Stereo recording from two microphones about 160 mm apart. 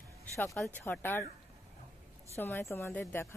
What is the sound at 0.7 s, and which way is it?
Speech, 15° left (ahead or behind).